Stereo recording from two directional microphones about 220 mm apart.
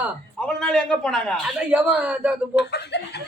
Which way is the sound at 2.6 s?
50° left (ahead or behind).